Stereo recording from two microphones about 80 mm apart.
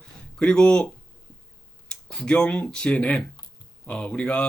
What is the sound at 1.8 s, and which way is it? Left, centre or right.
Speech, centre.